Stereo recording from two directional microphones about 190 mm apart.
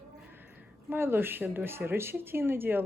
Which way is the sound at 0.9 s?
10° right (ahead or behind).